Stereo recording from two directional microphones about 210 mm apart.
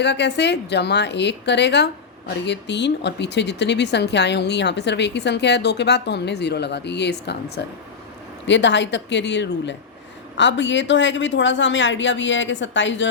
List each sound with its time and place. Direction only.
0.0 s speech: 55° left (ahead or behind)